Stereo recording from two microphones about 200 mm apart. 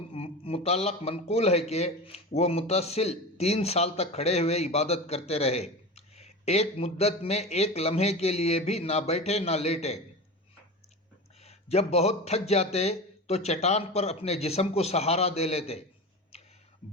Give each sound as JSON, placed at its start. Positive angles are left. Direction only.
{"t": 0.1, "sound": "speech", "side_deg": 30}
{"t": 11.4, "sound": "speech", "side_deg": 30}